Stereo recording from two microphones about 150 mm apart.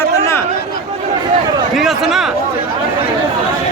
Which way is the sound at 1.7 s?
Centre (ahead or behind).